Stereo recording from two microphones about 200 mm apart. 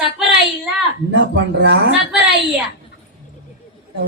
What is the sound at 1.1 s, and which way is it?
Speech, 60° right (ahead or behind).